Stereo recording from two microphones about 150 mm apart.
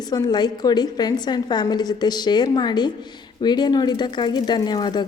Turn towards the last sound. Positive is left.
turn(degrees=30)  # may be behind; listen again after turning